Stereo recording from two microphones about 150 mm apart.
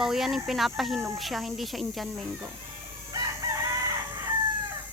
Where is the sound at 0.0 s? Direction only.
Centre (ahead or behind).